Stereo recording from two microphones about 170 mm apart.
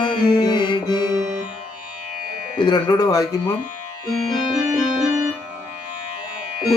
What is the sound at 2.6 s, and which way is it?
Mantra, 25° left (ahead or behind).